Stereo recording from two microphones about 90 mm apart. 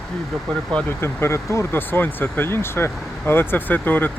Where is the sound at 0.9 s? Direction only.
30° left (ahead or behind).